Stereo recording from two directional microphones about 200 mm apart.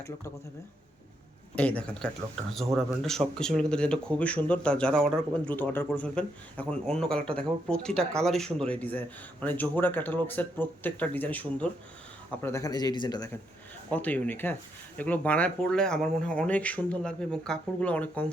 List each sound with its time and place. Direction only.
1.5 s a man's voice: 5° left (ahead or behind)
13.9 s a man's voice: 5° left (ahead or behind)